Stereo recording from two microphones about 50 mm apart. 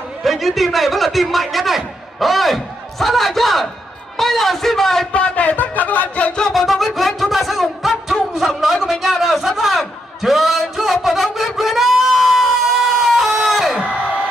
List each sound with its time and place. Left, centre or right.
0.2 s a man's voice: centre
5.1 s speech: left
6.5 s music: centre
8.5 s a sound: centre